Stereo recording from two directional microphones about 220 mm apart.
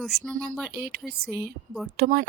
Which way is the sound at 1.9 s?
45° right (ahead or behind).